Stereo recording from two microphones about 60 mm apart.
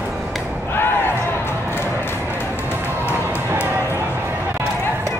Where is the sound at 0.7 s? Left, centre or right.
Left.